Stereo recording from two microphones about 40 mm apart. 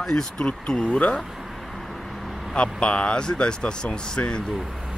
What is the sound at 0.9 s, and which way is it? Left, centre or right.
Speech, left.